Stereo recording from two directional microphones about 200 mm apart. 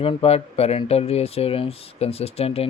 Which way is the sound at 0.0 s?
30° left (ahead or behind).